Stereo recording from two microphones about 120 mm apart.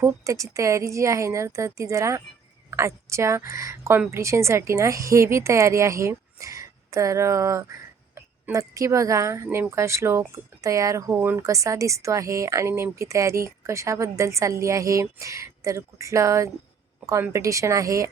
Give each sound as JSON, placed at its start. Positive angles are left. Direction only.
{"t": 0.0, "sound": "a woman's voice", "side_deg": -25}